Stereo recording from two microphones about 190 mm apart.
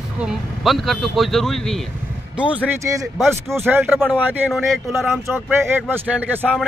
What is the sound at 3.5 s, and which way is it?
Speech, 10° right (ahead or behind).